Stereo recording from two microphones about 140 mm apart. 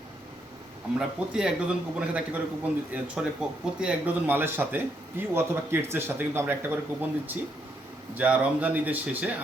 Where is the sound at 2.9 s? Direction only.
5° right (ahead or behind).